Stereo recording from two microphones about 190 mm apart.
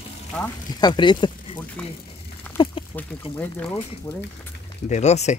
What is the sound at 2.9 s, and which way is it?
Speech, 10° left (ahead or behind).